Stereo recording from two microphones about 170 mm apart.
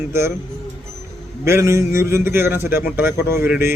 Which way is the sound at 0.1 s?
15° right (ahead or behind).